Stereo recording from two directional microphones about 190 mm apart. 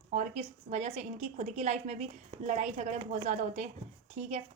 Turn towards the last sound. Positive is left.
turn(degrees=-35)  # may be behind; listen again after turning